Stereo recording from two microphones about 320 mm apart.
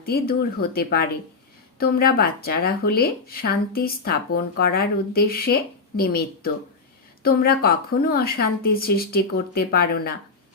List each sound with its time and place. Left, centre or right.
0.0 s speech: left